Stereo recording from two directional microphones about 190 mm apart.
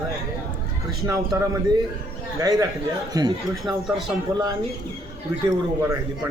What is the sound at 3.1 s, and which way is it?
Speech, 20° right (ahead or behind).